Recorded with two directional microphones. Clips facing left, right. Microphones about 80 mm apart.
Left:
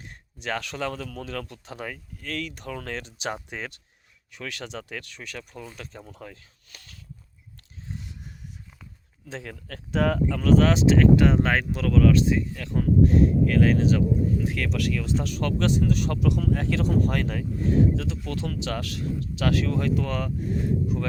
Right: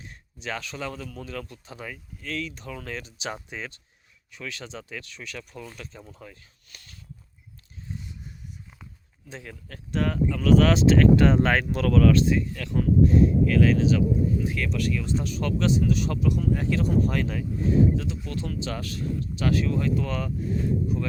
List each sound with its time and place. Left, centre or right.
0.0 s speech: left
6.1 s speech: left
7.9 s wild animals: left
9.3 s speech: left
10.4 s speech: left
10.7 s speech: centre
13.0 s a sound: left
13.4 s speech: left
14.4 s speech: left
16.3 s speech: left
20.1 s speech: left